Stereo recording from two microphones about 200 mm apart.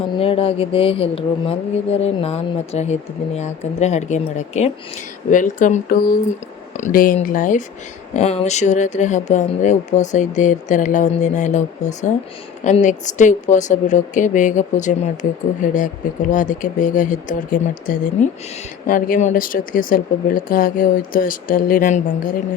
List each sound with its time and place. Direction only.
0.2 s speech: 30° left (ahead or behind)